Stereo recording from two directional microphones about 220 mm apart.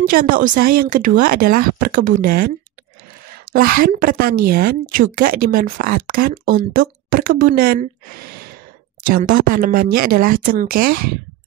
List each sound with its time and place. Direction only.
0.0 s a woman's voice: 40° right (ahead or behind)
3.5 s a woman's voice: 40° right (ahead or behind)
9.1 s a woman's voice: 40° right (ahead or behind)